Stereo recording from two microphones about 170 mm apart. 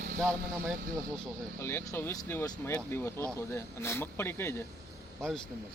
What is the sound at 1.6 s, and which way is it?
Speech, 15° left (ahead or behind).